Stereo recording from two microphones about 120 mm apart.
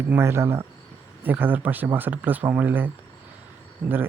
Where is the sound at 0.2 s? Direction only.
20° right (ahead or behind).